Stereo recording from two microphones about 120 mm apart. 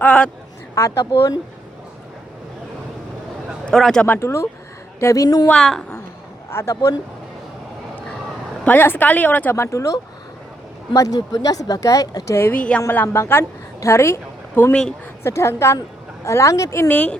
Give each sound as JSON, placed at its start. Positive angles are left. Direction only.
{"t": 0.0, "sound": "speech", "side_deg": 10}
{"t": 0.8, "sound": "speech", "side_deg": 25}
{"t": 3.7, "sound": "speech", "side_deg": 5}
{"t": 4.0, "sound": "speech", "side_deg": 20}
{"t": 5.5, "sound": "speech", "side_deg": 5}
{"t": 6.5, "sound": "speech", "side_deg": 25}
{"t": 8.6, "sound": "speech", "side_deg": 15}
{"t": 16.9, "sound": "speech", "side_deg": 10}